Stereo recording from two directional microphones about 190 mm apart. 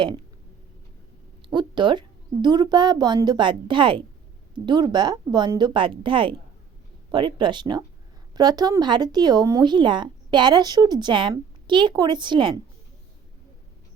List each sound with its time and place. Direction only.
1.5 s speech: 25° right (ahead or behind)